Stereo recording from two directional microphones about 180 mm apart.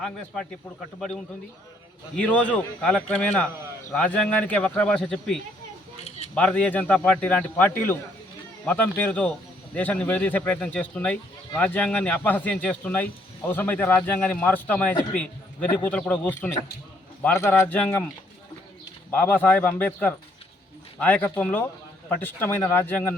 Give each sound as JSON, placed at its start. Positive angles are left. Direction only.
{"t": 0.9, "sound": "a man's voice", "side_deg": 0}
{"t": 6.1, "sound": "keys jangling", "side_deg": 35}
{"t": 6.3, "sound": "speech", "side_deg": 5}
{"t": 19.1, "sound": "speech", "side_deg": 10}